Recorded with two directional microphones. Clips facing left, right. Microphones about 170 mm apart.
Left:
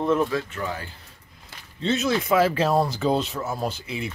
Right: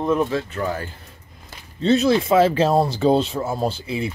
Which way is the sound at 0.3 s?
30° right (ahead or behind).